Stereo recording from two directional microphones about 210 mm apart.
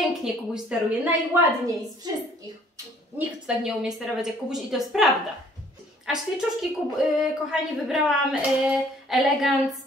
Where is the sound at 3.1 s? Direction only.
10° right (ahead or behind).